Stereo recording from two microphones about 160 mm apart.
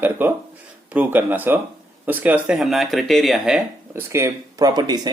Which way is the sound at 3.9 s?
15° right (ahead or behind).